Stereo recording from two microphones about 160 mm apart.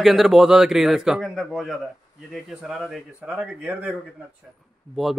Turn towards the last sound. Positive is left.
turn(degrees=0)  # may be behind; listen again after turning